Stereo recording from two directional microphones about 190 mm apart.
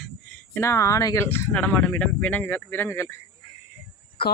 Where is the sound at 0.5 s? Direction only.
15° left (ahead or behind).